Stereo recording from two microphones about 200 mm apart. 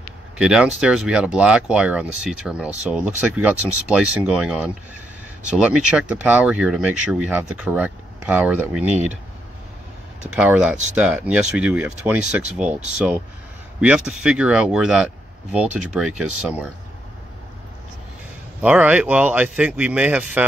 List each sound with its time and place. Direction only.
0.4 s speech: 5° right (ahead or behind)
10.3 s speech: 5° right (ahead or behind)
18.6 s speech: 5° right (ahead or behind)